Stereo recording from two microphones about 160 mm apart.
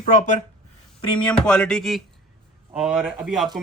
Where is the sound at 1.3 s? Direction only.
5° left (ahead or behind).